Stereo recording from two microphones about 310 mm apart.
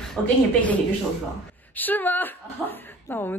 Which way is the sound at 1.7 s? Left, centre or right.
Centre.